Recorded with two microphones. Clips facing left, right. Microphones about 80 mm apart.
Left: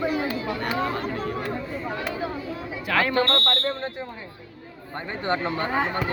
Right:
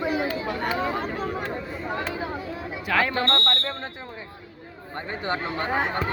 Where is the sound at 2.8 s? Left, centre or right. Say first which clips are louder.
Left 2 dB; centre.